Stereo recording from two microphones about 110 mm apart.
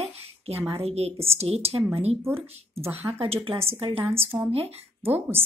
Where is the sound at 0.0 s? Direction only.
70° right (ahead or behind).